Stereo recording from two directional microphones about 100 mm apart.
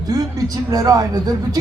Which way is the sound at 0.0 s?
40° right (ahead or behind).